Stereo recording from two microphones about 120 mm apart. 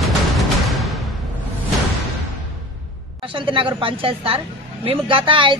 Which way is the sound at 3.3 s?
45° right (ahead or behind).